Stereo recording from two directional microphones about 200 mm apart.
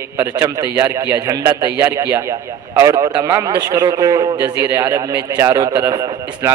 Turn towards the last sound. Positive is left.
turn(degrees=-15)  # may be behind; listen again after turning